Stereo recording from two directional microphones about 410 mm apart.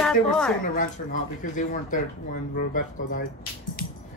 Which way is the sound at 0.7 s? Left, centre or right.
Centre.